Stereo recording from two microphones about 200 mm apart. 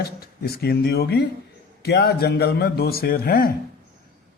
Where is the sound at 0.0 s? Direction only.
50° left (ahead or behind).